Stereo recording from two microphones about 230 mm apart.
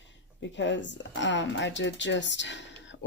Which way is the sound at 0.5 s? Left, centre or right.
Left.